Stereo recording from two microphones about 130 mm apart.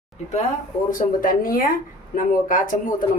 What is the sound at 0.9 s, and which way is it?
Speech, 90° left.